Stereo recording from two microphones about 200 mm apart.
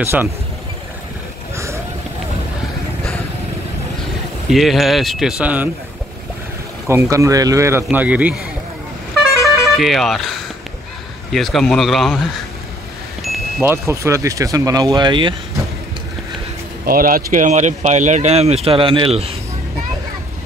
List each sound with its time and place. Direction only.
0.0 s speech: 10° right (ahead or behind)
4.5 s speech: centre (ahead or behind)
6.9 s speech: 15° right (ahead or behind)
9.8 s speech: centre (ahead or behind)
13.6 s speech: 15° right (ahead or behind)
16.8 s speech: 45° right (ahead or behind); by 19.3 s 30° right (ahead or behind)